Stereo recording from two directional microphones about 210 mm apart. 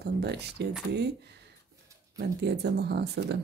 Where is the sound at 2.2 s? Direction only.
50° right (ahead or behind).